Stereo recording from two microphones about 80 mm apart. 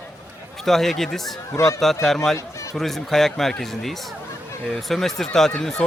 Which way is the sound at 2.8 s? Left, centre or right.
Centre.